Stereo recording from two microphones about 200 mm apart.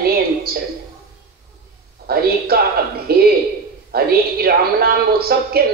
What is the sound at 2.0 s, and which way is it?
A woman's voice, 50° right (ahead or behind).